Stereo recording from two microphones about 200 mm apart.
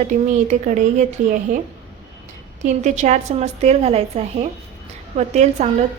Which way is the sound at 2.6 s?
35° right (ahead or behind).